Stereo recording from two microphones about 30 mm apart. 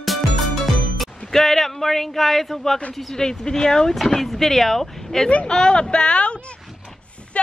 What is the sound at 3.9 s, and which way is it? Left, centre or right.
Speech, centre.